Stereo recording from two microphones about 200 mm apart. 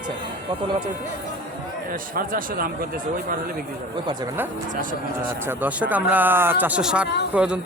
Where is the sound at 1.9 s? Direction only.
45° right (ahead or behind).